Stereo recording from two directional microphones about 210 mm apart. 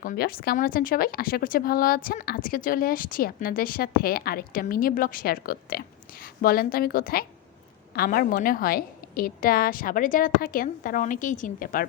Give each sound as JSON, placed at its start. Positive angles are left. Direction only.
{"t": 0.0, "sound": "speech", "side_deg": 45}